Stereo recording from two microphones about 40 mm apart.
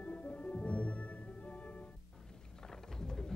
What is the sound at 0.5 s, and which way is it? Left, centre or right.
Music, left.